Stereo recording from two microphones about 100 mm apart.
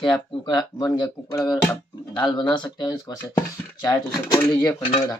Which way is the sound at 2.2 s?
45° left (ahead or behind).